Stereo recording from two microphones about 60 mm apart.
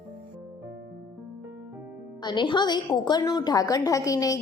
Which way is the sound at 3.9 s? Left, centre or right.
Left.